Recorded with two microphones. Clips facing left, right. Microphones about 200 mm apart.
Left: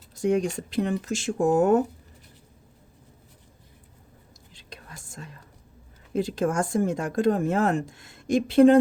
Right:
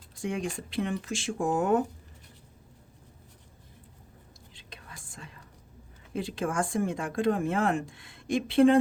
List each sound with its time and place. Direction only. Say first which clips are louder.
0.2 s speech: left 9 dB; 40° left (ahead or behind)
4.5 s whispering: left 4 dB; 40° left (ahead or behind)
6.1 s speech: left 5 dB; 40° left (ahead or behind)